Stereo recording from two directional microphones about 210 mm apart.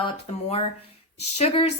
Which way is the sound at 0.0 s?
30° left (ahead or behind).